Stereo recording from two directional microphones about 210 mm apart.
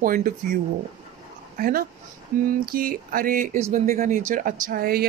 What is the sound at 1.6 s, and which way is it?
Speech, 45° right (ahead or behind).